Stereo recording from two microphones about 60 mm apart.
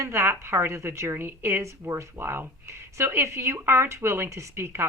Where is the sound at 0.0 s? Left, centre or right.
Right.